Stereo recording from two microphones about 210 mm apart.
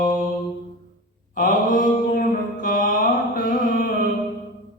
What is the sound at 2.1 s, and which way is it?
Music, 40° left (ahead or behind).